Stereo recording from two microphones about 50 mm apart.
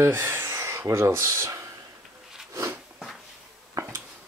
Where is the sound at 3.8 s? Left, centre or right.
Right.